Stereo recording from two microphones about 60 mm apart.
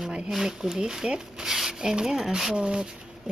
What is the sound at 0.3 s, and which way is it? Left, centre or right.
Speech, centre.